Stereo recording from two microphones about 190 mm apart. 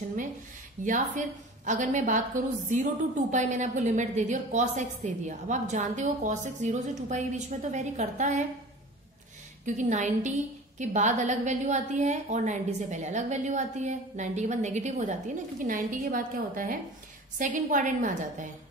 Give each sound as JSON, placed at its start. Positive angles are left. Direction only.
{"t": 0.8, "sound": "a woman's voice", "side_deg": -40}
{"t": 9.7, "sound": "a woman's voice", "side_deg": -40}